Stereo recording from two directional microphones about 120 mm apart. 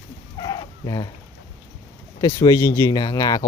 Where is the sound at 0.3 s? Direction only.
35° left (ahead or behind).